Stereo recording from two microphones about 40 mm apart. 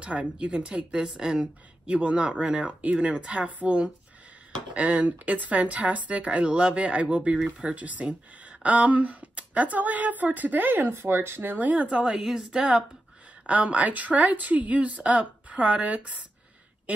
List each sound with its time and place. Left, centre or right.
0.0 s a woman's voice: right
10.9 s speech: right
11.5 s speech: right
12.1 s a woman's voice: centre
13.5 s speech: right